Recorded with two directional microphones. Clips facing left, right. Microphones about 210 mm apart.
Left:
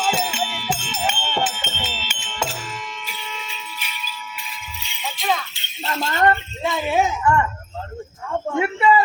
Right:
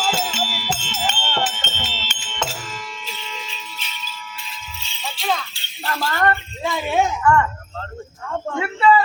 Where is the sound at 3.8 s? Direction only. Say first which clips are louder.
Left 1 dB; 10° left (ahead or behind).